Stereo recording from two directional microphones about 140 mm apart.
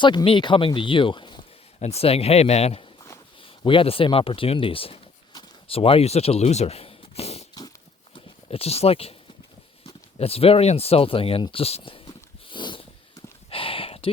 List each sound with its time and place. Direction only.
0.0 s speech: 35° left (ahead or behind)
1.8 s speech: 50° left (ahead or behind)
3.4 s speech: 40° left (ahead or behind)
9.8 s a sound: 45° left (ahead or behind)